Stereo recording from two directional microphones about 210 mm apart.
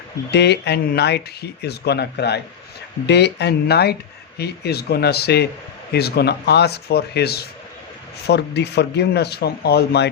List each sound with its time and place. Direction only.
0.3 s speech: 55° left (ahead or behind)